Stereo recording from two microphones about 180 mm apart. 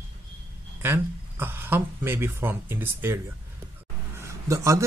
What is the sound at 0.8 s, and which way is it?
Speech, 10° right (ahead or behind).